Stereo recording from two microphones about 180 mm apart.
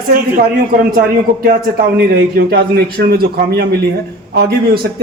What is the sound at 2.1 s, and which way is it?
A man's voice, 60° right (ahead or behind).